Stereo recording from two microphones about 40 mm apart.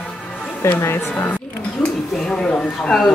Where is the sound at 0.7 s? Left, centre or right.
Left.